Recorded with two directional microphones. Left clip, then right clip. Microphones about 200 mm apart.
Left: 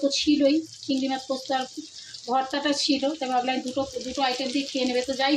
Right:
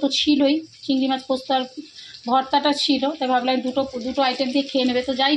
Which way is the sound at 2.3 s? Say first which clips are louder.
Right 6 dB; 25° right (ahead or behind).